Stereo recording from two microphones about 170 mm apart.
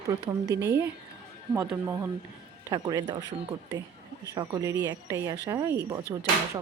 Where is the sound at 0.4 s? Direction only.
75° right (ahead or behind).